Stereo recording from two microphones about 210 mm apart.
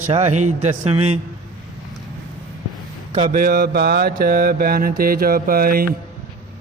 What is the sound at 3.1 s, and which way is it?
Mantra, 35° right (ahead or behind).